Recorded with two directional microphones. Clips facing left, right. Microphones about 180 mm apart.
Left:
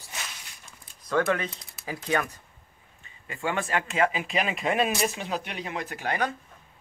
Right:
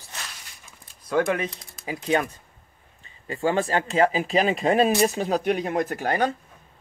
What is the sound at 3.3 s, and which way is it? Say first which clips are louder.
Speech: right 6 dB; 30° right (ahead or behind).